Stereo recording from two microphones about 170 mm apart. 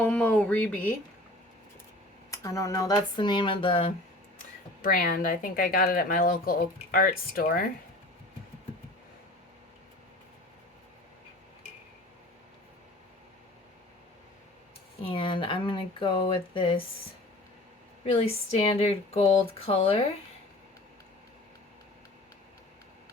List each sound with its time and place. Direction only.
0.0 s speech: 5° left (ahead or behind)
2.3 s speech: 20° left (ahead or behind)
4.8 s speech: 55° left (ahead or behind)
15.0 s speech: 30° left (ahead or behind)
18.0 s speech: 35° left (ahead or behind)